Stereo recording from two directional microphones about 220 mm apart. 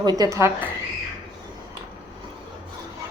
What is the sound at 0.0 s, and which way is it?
Speech, 15° right (ahead or behind).